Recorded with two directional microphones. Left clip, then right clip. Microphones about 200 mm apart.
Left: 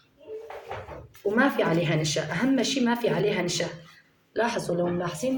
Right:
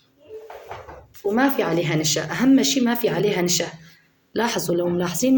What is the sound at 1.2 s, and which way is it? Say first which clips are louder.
A woman's voice: right 3 dB; 40° right (ahead or behind).